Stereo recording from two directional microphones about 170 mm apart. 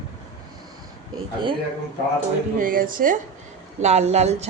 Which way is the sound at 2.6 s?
55° right (ahead or behind).